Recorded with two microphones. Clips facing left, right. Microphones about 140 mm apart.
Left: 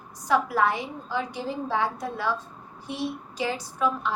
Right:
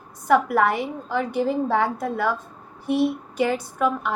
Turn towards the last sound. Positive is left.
turn(degrees=-55)  # may be behind; listen again after turning